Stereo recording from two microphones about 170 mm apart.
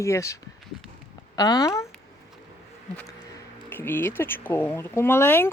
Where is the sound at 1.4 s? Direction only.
20° left (ahead or behind).